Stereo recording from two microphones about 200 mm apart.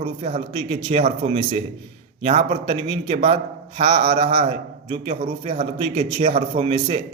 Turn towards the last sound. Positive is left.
turn(degrees=-30)  # may be behind; listen again after turning